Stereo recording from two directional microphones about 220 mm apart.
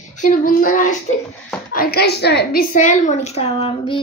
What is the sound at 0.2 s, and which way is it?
A child's voice, 40° left (ahead or behind).